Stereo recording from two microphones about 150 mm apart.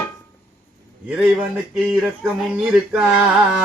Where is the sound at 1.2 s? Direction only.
10° right (ahead or behind).